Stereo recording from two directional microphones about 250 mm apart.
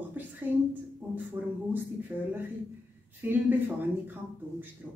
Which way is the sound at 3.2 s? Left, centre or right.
Centre.